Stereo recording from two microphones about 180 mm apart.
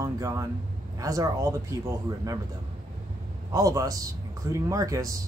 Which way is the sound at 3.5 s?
20° right (ahead or behind).